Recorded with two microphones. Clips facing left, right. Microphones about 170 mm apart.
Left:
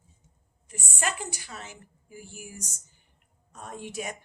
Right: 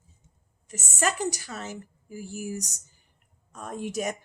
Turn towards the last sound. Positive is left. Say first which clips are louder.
# right 6 dB
turn(degrees=-45)  # may be behind; listen again after turning